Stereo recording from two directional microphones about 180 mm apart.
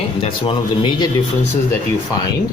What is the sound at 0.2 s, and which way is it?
Speech, 30° left (ahead or behind).